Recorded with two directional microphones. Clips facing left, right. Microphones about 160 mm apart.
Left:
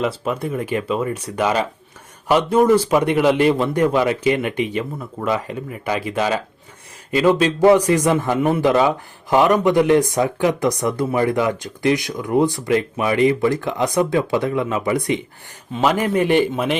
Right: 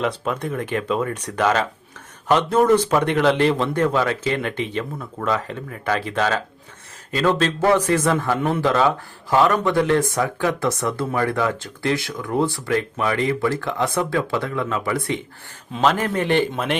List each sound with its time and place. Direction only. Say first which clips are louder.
0.0 s a man's voice: left 2 dB; 5° left (ahead or behind)